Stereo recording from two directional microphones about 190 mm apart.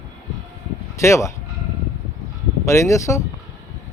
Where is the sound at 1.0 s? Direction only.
15° left (ahead or behind).